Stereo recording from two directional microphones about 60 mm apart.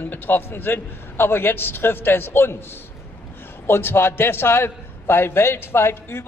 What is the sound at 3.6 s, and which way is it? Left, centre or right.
A man's voice, left.